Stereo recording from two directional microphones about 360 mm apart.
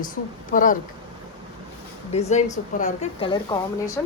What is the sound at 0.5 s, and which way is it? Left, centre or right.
Speech, left.